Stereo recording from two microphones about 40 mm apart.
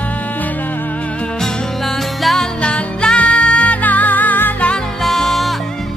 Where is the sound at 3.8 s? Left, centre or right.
Left.